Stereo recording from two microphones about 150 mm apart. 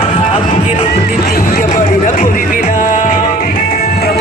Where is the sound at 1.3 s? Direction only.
70° left (ahead or behind).